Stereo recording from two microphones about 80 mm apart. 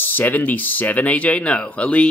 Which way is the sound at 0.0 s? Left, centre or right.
Left.